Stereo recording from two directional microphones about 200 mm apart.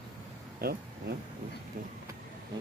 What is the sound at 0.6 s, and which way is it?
Speech, 50° right (ahead or behind).